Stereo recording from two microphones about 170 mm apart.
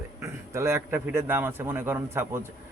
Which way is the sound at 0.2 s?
15° right (ahead or behind).